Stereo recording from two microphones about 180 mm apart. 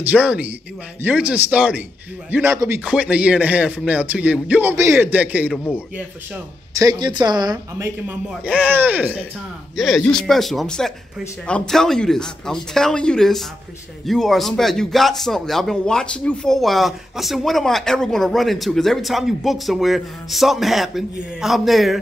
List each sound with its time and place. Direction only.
0.0 s speech: 5° right (ahead or behind)
6.9 s speech: 25° right (ahead or behind)
8.1 s speech: 5° right (ahead or behind)